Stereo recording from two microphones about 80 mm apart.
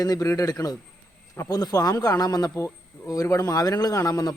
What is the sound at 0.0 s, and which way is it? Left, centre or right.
A man's voice, left.